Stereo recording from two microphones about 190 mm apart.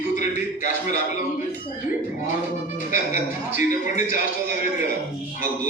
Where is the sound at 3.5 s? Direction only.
40° left (ahead or behind).